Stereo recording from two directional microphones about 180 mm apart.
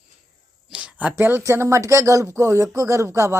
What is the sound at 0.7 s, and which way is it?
Speech, 5° right (ahead or behind).